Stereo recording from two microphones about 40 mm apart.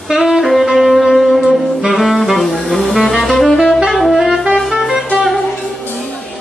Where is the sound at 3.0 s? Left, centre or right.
Centre.